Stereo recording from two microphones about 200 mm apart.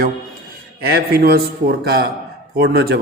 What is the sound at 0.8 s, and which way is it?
A man's voice, 50° right (ahead or behind).